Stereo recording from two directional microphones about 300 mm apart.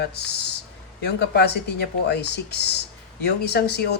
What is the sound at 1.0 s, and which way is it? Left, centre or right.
Speech, left.